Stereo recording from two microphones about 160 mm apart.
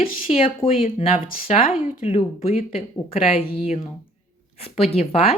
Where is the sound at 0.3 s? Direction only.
35° left (ahead or behind).